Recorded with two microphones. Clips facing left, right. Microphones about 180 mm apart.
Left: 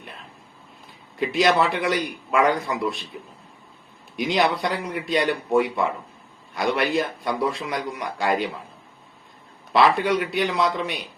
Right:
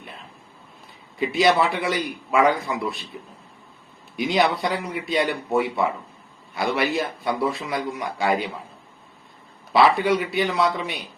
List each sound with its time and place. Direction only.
1.2 s a man's voice: centre (ahead or behind)
4.2 s a man's voice: centre (ahead or behind)
9.7 s a man's voice: centre (ahead or behind)